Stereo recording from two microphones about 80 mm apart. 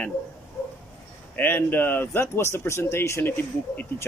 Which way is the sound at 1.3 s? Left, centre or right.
Left.